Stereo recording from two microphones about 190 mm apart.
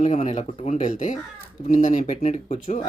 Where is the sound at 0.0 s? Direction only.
35° left (ahead or behind).